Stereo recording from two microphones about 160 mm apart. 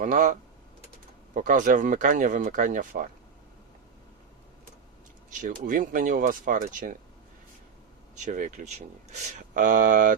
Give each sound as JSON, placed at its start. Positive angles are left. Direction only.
{"t": 0.0, "sound": "speech", "side_deg": -55}
{"t": 5.3, "sound": "speech", "side_deg": -55}
{"t": 8.1, "sound": "speech", "side_deg": -50}
{"t": 9.6, "sound": "speech", "side_deg": -60}